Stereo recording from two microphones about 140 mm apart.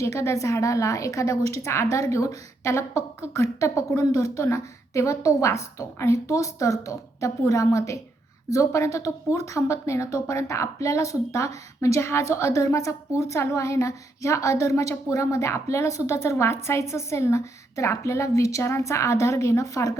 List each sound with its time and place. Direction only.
0.0 s a woman's voice: 20° left (ahead or behind)